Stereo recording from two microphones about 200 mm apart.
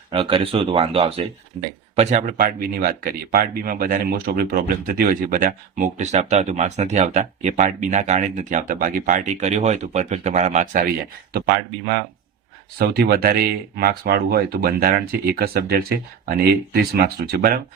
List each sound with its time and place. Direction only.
0.1 s speech: 25° right (ahead or behind)
2.7 s speech: 45° right (ahead or behind)
12.8 s speech: 50° right (ahead or behind)